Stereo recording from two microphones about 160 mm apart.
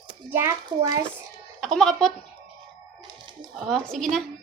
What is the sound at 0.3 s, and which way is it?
Speech, 15° right (ahead or behind).